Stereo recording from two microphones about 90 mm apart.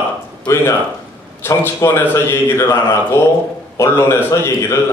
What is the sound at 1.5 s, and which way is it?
Speech, 30° left (ahead or behind).